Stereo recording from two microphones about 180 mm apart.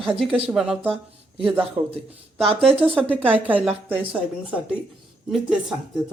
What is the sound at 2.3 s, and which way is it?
Speech, 30° right (ahead or behind).